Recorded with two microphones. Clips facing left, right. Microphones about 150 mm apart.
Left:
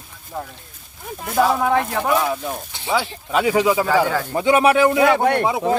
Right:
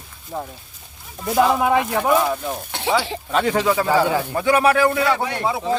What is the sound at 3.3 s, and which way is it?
Speech, 5° left (ahead or behind).